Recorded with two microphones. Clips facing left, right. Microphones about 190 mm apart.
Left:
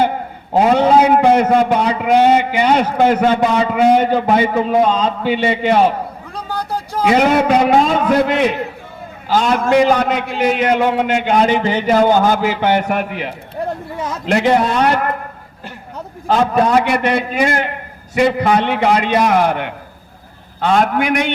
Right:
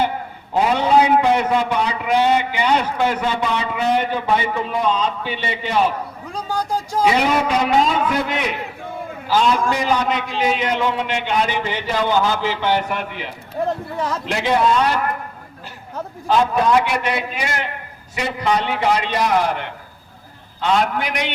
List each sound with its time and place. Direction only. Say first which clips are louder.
0.5 s a man's voice: left 5 dB; 45° left (ahead or behind)
6.3 s a sound: right 1 dB; 10° right (ahead or behind)
7.1 s a man's voice: left 8 dB; 50° left (ahead or behind)
16.2 s a man's voice: left 3 dB; 55° left (ahead or behind)